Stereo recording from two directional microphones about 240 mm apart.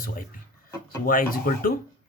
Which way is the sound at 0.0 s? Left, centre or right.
Left.